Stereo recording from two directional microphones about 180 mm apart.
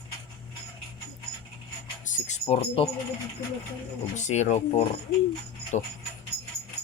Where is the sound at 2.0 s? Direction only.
40° left (ahead or behind).